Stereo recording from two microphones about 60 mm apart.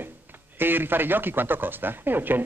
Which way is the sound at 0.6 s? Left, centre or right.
Right.